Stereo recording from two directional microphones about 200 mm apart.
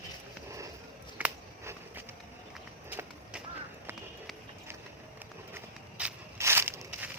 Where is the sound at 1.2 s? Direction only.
10° right (ahead or behind).